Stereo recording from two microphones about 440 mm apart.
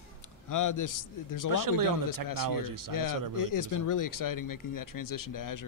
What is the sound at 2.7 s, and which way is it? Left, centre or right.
Speech, right.